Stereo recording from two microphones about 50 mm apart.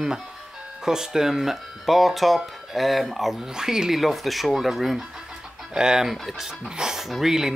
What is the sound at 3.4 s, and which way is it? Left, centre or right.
Speech, centre.